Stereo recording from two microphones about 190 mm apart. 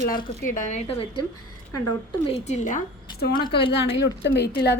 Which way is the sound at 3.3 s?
25° left (ahead or behind).